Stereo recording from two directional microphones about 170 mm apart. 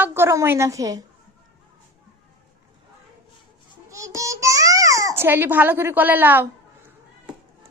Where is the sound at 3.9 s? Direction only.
20° right (ahead or behind).